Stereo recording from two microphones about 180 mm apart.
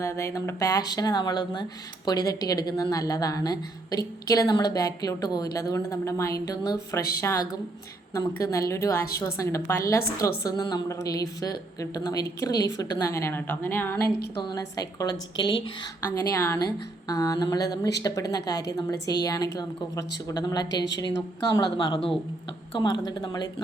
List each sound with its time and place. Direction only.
0.0 s a woman's voice: 15° left (ahead or behind)
8.4 s a woman's voice: 15° left (ahead or behind)